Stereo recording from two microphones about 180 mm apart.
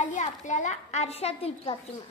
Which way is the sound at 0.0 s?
45° left (ahead or behind).